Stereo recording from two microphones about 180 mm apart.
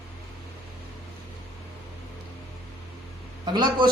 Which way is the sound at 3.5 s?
25° right (ahead or behind).